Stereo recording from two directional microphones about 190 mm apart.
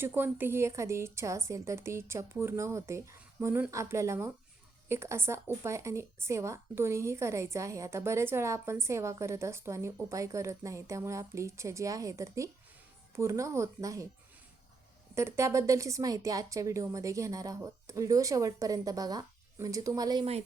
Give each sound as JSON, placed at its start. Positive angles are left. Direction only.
{"t": 0.0, "sound": "speech", "side_deg": -10}
{"t": 15.1, "sound": "speech", "side_deg": -15}